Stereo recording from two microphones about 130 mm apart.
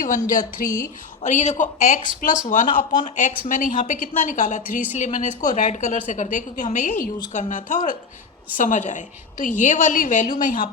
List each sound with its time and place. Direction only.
0.0 s a woman's voice: 85° left
1.2 s a woman's voice: 70° left (ahead or behind)